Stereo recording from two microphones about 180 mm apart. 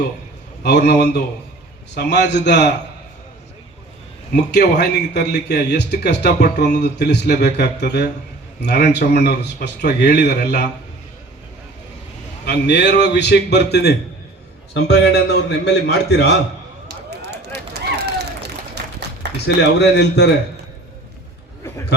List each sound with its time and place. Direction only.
0.6 s a man's voice: 65° left (ahead or behind)
4.5 s a man's voice: 70° left (ahead or behind)
12.5 s a man's voice: 70° left (ahead or behind)
16.9 s a sound: 65° right (ahead or behind)
19.5 s a man's voice: 70° left (ahead or behind)